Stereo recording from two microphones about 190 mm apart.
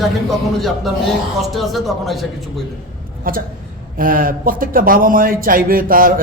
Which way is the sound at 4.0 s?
45° right (ahead or behind).